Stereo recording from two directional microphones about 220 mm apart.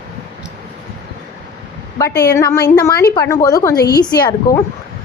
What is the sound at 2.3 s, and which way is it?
A woman's voice, 10° left (ahead or behind).